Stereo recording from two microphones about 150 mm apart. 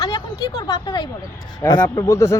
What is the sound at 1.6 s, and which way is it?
Speech, 15° left (ahead or behind).